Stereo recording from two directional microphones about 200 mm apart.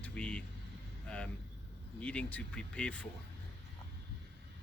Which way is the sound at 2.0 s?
5° left (ahead or behind).